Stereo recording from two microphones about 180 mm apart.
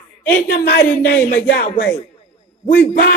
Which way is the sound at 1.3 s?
65° left (ahead or behind).